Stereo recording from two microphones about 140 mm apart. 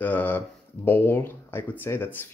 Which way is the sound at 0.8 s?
15° left (ahead or behind).